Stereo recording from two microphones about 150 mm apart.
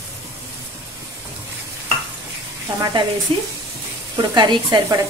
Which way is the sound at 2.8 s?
25° right (ahead or behind).